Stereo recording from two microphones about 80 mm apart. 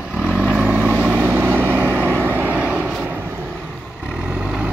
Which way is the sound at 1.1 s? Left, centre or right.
Right.